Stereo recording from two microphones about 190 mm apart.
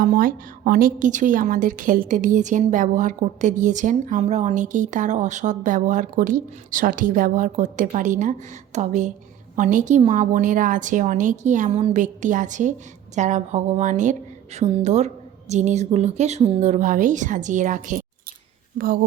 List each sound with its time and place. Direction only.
0.0 s a woman's voice: 45° right (ahead or behind)